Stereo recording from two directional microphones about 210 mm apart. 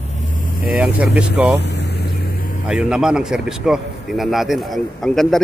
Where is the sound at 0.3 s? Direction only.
40° left (ahead or behind).